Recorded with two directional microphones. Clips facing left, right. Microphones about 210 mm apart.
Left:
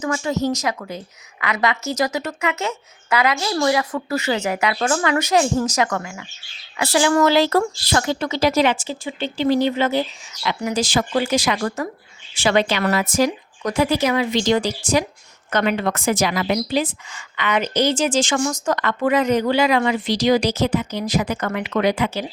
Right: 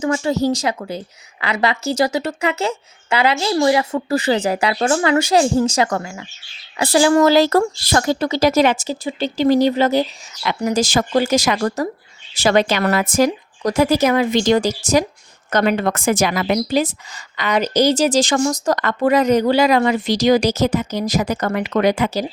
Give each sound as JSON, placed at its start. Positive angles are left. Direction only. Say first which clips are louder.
{"t": 0.0, "sound": "a woman's voice", "louder": "right 4 dB", "side_deg": -30}